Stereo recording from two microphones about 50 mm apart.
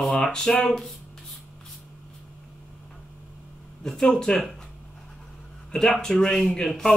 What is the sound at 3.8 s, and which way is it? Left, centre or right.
Speech, centre.